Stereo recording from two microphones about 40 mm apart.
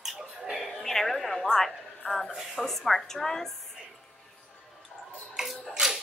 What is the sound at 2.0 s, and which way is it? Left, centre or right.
Speech, left.